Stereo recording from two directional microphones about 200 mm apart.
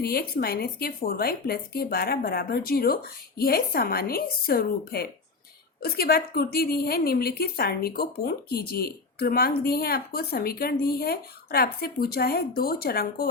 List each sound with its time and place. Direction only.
0.0 s a woman's voice: 50° left (ahead or behind)